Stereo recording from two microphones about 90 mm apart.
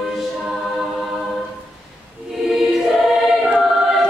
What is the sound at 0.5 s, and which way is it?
Choir, centre (ahead or behind).